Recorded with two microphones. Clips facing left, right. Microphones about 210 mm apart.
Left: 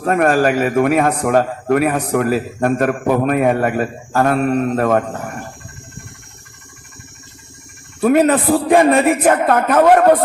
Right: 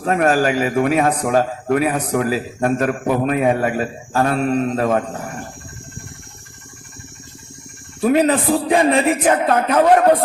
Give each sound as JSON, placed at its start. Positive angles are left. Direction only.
{"t": 0.0, "sound": "a man's voice", "side_deg": 50}
{"t": 8.0, "sound": "a man's voice", "side_deg": 50}